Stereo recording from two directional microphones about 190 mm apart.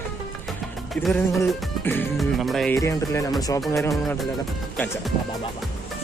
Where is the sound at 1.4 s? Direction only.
10° left (ahead or behind).